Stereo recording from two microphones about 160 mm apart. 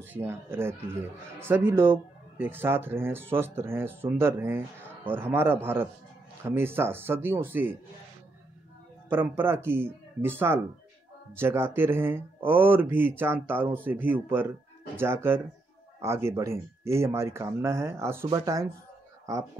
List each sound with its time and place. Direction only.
0.0 s speech: 15° right (ahead or behind)
9.1 s speech: 15° right (ahead or behind)